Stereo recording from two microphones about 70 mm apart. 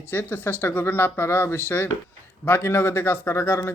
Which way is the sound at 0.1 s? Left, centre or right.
Left.